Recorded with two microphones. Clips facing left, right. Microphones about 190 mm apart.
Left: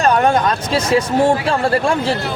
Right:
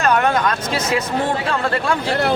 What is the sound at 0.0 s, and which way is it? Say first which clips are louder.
A man's voice: left 3 dB; 30° left (ahead or behind).